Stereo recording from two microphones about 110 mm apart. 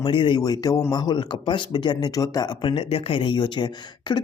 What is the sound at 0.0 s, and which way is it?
Speech, 50° left (ahead or behind).